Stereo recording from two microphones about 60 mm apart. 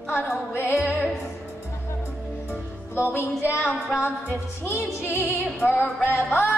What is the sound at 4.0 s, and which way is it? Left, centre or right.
Music, left.